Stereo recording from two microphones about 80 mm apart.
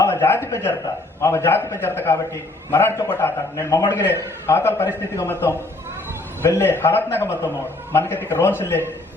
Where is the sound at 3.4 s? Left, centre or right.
Left.